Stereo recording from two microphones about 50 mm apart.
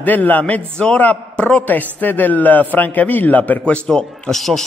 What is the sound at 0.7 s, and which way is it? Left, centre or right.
A man's voice, centre.